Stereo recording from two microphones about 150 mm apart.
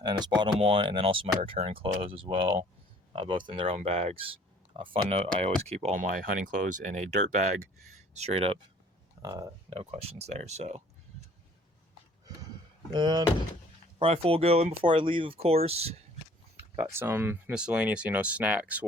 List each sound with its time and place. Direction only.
0.0 s speech: 30° right (ahead or behind)
9.2 s speech: 25° right (ahead or behind)
9.6 s speech: 40° right (ahead or behind)
12.9 s speech: 30° right (ahead or behind)
14.0 s speech: 40° right (ahead or behind)
16.9 s speech: 15° right (ahead or behind)